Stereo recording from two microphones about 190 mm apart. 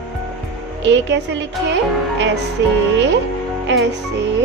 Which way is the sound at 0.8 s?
70° right (ahead or behind).